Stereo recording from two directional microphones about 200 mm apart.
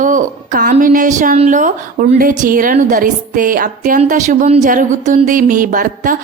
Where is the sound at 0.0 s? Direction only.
40° right (ahead or behind).